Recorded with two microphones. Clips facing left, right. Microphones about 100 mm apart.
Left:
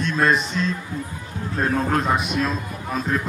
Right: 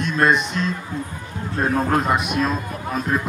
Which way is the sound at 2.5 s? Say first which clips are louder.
Right 3 dB; 50° right (ahead or behind).